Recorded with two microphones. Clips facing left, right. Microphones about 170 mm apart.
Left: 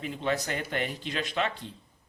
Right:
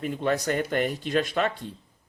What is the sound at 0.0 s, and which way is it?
Speech, 50° right (ahead or behind).